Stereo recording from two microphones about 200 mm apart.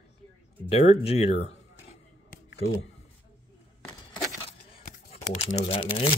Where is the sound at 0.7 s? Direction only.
30° left (ahead or behind).